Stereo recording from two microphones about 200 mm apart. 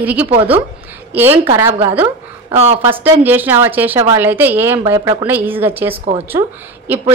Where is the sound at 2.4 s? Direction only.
30° right (ahead or behind).